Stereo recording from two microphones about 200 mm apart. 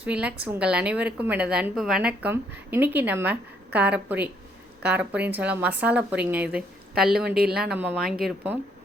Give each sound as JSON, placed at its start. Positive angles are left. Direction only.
{"t": 0.0, "sound": "a woman's voice", "side_deg": -5}
{"t": 7.3, "sound": "speech", "side_deg": -50}
{"t": 7.5, "sound": "speech", "side_deg": -5}